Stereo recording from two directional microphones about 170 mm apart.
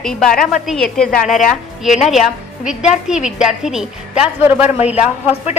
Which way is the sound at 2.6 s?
5° right (ahead or behind).